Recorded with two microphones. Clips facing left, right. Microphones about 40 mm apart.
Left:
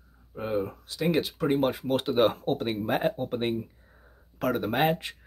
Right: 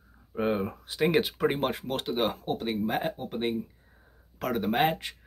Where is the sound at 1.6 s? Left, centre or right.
Centre.